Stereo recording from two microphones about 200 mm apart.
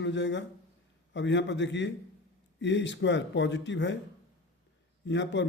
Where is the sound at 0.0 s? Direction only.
65° left (ahead or behind).